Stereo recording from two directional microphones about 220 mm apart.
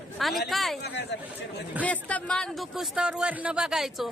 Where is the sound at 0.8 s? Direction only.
50° left (ahead or behind).